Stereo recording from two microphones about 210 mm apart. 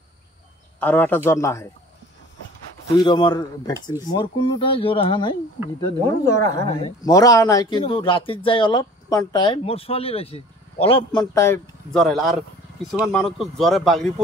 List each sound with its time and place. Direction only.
0.7 s speech: 10° left (ahead or behind)
3.0 s speech: 20° left (ahead or behind)
5.8 s speech: 15° left (ahead or behind)